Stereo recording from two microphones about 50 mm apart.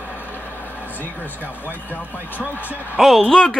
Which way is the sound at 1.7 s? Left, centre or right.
Left.